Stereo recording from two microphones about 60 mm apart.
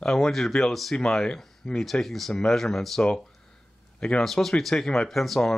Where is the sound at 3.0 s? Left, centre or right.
Centre.